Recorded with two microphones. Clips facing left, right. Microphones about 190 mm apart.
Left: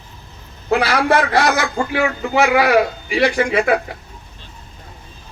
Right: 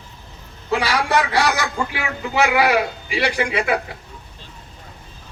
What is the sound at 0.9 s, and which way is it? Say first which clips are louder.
A man's voice: left 4 dB; 50° left (ahead or behind).